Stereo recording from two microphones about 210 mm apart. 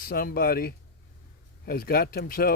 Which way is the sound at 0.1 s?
45° left (ahead or behind).